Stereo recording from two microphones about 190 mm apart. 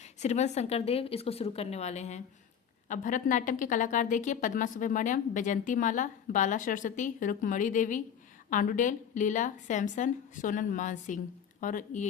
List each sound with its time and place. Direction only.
0.0 s a woman's voice: 35° left (ahead or behind)